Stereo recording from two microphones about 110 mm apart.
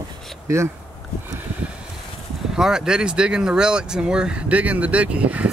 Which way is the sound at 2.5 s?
5° right (ahead or behind).